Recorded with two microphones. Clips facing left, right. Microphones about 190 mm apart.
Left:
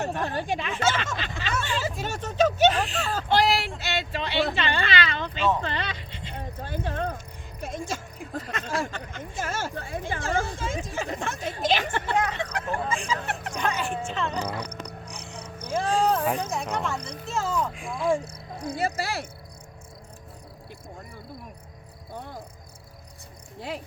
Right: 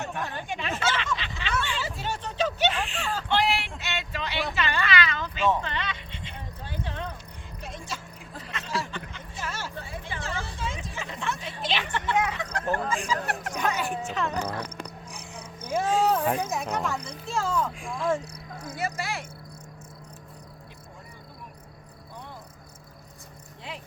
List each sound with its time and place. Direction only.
0.0 s speech: 35° left (ahead or behind)
1.6 s a sound: 45° left (ahead or behind)
7.6 s speech: 45° left (ahead or behind)
12.7 s speech: centre (ahead or behind)
15.1 s a sound: 5° right (ahead or behind)
15.7 s speech: 5° right (ahead or behind)
18.8 s speech: 35° left (ahead or behind)
22.1 s cricket: 45° left (ahead or behind)
23.6 s speech: 45° left (ahead or behind)